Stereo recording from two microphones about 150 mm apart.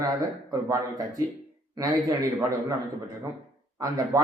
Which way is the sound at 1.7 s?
25° right (ahead or behind).